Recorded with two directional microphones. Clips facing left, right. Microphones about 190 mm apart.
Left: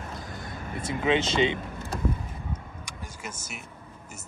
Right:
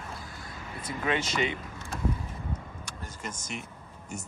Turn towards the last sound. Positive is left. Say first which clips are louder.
# right 2 dB
turn(degrees=5)  # may be behind; listen again after turning